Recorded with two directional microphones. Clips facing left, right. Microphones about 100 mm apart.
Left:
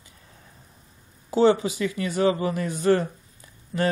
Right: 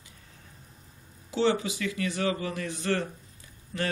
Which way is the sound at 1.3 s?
35° left (ahead or behind).